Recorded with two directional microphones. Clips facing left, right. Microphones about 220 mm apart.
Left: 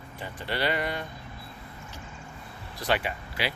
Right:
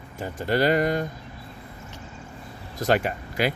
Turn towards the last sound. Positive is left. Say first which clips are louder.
# right 7 dB
turn(degrees=-45)  # may be behind; listen again after turning